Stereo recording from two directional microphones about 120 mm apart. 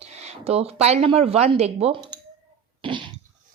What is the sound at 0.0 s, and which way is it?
Speech, 65° right (ahead or behind).